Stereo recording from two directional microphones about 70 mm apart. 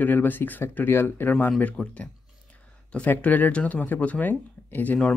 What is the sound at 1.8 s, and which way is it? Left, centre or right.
Speech, centre.